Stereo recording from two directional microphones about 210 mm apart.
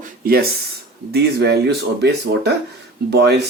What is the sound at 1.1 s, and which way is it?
Speech, 50° right (ahead or behind).